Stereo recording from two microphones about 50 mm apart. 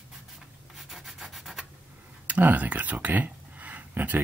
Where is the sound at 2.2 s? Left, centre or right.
Right.